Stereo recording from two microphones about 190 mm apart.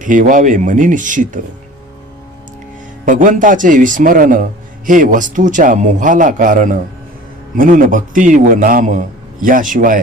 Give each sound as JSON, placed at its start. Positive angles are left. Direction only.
{"t": 0.0, "sound": "a man's voice", "side_deg": -45}
{"t": 3.1, "sound": "a man's voice", "side_deg": -45}